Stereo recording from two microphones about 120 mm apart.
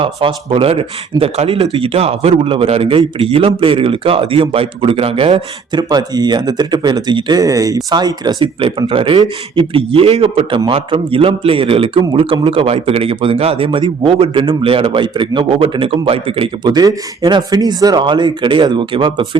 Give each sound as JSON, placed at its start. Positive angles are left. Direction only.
{"t": 0.0, "sound": "a man's voice", "side_deg": -45}
{"t": 5.7, "sound": "speech", "side_deg": -35}
{"t": 8.6, "sound": "a man's voice", "side_deg": -50}
{"t": 16.7, "sound": "speech", "side_deg": -35}